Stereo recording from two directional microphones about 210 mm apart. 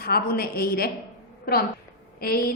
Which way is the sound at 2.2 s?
45° left (ahead or behind).